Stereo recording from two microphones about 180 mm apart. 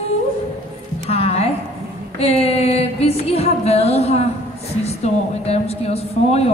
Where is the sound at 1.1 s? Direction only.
35° left (ahead or behind).